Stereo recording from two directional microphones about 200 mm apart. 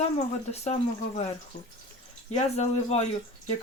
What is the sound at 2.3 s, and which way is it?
Speech, 30° left (ahead or behind).